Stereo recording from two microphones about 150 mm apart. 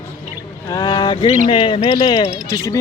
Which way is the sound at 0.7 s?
25° left (ahead or behind).